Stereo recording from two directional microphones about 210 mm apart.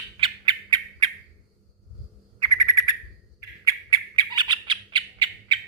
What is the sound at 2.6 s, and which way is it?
Bird, 15° right (ahead or behind).